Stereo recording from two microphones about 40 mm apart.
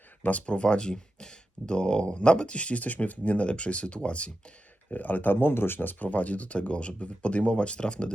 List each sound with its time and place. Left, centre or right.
0.2 s speech: left
4.9 s speech: left
6.1 s speech: left